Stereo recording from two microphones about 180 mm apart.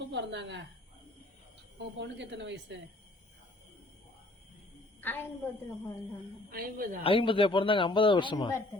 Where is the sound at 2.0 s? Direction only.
80° right.